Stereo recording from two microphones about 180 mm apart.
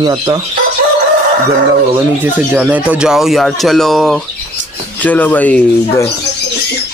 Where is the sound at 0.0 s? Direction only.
25° right (ahead or behind).